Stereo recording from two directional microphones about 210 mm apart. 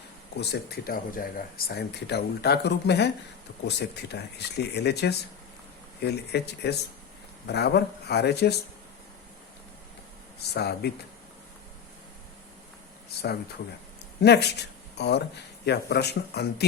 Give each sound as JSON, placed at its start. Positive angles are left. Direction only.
{"t": 0.3, "sound": "speech", "side_deg": 50}
{"t": 10.5, "sound": "speech", "side_deg": 50}
{"t": 14.2, "sound": "speech", "side_deg": 50}